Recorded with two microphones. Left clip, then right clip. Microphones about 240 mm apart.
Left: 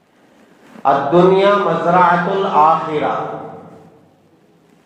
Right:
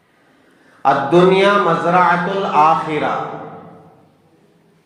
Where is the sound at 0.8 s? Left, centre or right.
Right.